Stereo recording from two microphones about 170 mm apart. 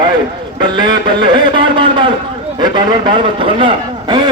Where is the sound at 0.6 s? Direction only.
25° right (ahead or behind).